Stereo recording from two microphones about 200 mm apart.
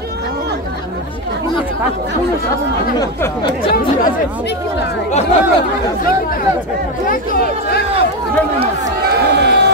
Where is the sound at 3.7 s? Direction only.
45° left (ahead or behind).